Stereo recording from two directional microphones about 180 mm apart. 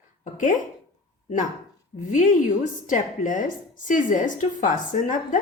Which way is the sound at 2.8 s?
45° left (ahead or behind).